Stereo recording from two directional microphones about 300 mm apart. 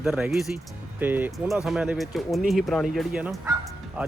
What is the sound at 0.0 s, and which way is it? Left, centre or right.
A man's voice, centre.